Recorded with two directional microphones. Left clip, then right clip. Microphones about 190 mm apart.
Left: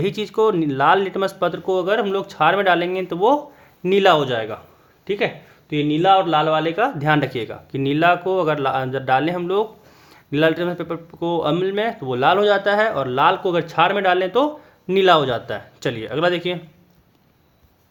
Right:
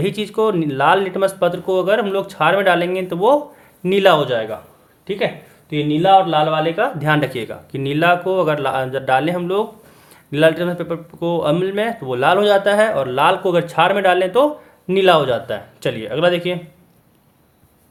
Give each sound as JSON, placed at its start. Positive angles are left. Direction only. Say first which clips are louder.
{"t": 0.0, "sound": "a man's voice", "louder": "even", "side_deg": 30}